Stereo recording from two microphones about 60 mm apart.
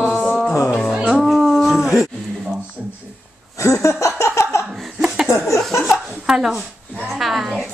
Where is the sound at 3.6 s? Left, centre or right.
Left.